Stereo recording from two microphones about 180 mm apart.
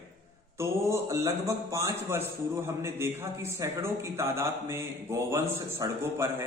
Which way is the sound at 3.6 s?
15° right (ahead or behind).